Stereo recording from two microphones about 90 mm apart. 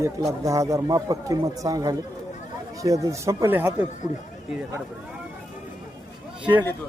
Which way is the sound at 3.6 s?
20° right (ahead or behind).